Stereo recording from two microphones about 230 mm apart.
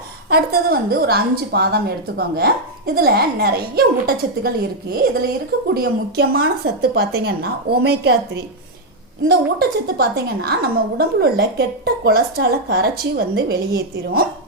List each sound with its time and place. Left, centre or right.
0.3 s a woman's voice: right